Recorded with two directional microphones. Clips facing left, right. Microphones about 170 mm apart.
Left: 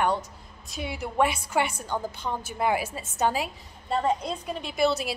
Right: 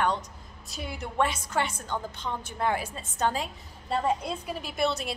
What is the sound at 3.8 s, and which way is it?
A woman's voice, 5° right (ahead or behind).